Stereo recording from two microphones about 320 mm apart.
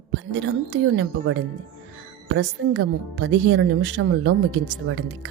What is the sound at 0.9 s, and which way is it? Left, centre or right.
Speech, right.